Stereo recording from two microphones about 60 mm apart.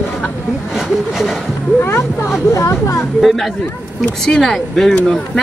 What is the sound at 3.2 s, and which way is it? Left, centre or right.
Speech, centre.